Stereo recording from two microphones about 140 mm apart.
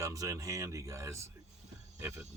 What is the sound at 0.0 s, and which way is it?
Speech, 25° right (ahead or behind).